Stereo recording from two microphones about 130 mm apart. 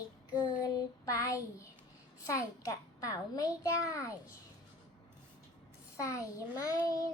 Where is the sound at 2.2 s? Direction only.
25° left (ahead or behind).